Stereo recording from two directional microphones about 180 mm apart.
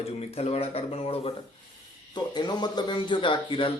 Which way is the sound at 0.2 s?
35° left (ahead or behind).